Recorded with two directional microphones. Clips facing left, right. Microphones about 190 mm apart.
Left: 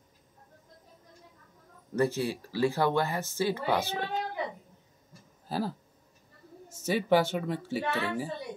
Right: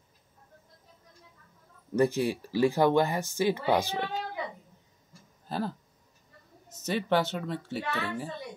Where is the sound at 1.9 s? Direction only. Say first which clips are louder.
Right 3 dB; 15° right (ahead or behind).